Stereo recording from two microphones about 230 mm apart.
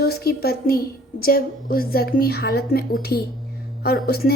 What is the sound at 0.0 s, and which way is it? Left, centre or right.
A woman's voice, left.